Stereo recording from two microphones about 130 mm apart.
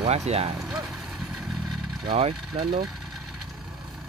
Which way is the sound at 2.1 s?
45° right (ahead or behind).